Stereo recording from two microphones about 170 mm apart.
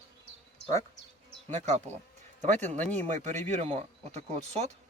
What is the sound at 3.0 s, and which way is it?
Speech, 45° right (ahead or behind).